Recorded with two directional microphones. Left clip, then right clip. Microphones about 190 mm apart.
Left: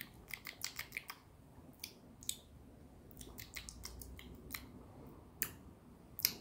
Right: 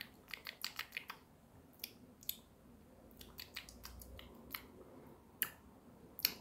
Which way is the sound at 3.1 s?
10° left (ahead or behind).